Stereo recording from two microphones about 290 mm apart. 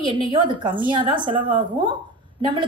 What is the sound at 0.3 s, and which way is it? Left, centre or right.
A woman's voice, centre.